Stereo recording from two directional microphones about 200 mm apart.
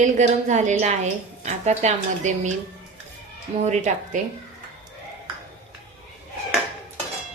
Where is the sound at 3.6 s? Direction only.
35° right (ahead or behind).